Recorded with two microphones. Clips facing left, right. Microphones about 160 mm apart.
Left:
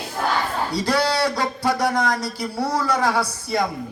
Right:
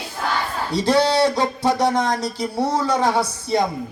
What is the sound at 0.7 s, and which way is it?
Speech, 25° right (ahead or behind).